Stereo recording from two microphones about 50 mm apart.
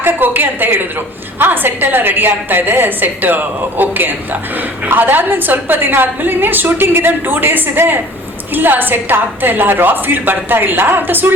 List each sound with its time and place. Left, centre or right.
0.0 s a woman's voice: right